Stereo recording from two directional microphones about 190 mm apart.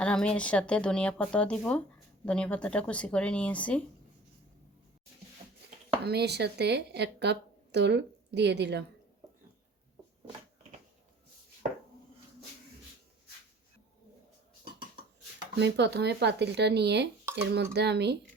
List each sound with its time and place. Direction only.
0.0 s speech: 5° left (ahead or behind)
6.0 s speech: 60° right (ahead or behind)
15.5 s speech: 65° right (ahead or behind)